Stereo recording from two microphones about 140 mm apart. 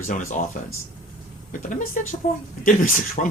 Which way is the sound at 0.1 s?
65° left (ahead or behind).